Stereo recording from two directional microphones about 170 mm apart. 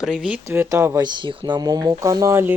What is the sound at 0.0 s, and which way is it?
Speech, 5° right (ahead or behind).